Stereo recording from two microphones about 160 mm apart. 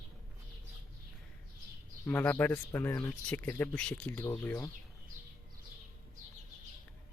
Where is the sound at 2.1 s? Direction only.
10° left (ahead or behind).